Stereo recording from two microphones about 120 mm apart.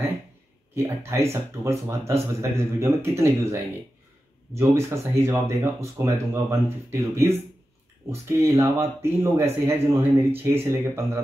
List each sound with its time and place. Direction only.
0.7 s speech: 25° right (ahead or behind)